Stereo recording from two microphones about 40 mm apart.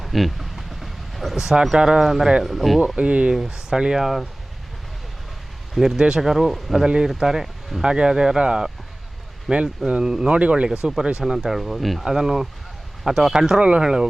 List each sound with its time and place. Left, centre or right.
0.0 s a sound: centre
1.7 s speech: centre
2.8 s speech: right
3.4 s speech: centre
4.0 s speech: centre
5.7 s speech: centre
6.8 s speech: right
7.1 s speech: centre
10.3 s speech: right
10.7 s speech: centre
11.3 s speech: centre
12.0 s speech: centre
13.6 s speech: right
13.8 s speech: centre